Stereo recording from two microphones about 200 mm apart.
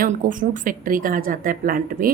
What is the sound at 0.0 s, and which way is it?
Speech, 45° right (ahead or behind).